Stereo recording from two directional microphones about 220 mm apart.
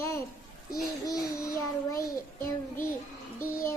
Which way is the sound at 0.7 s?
15° left (ahead or behind).